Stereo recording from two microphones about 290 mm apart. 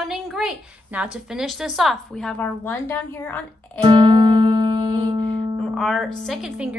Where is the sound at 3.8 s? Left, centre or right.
Centre.